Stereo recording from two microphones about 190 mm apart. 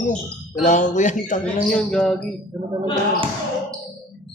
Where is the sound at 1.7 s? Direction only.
5° left (ahead or behind).